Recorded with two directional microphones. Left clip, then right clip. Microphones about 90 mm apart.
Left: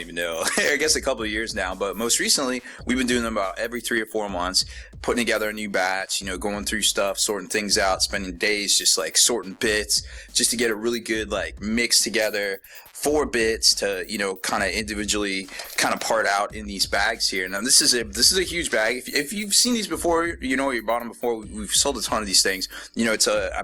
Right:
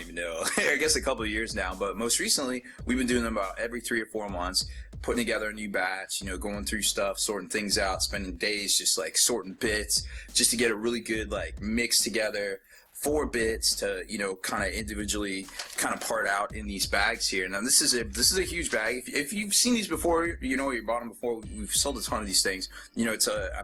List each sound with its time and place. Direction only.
0.2 s speech: 20° left (ahead or behind)
10.3 s speech: 5° left (ahead or behind); by 16.4 s 25° left (ahead or behind)
16.4 s speech: 10° left (ahead or behind)
20.7 s speech: 25° left (ahead or behind)